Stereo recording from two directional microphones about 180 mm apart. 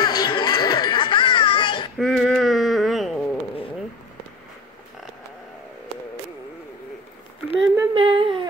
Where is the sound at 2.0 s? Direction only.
Centre (ahead or behind).